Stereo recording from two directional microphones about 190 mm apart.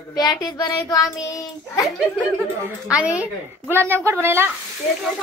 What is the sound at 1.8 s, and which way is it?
A child's voice, centre (ahead or behind).